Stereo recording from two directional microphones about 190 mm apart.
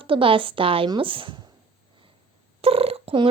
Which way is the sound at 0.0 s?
30° right (ahead or behind).